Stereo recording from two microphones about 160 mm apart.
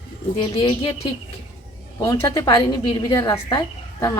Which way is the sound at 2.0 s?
20° left (ahead or behind).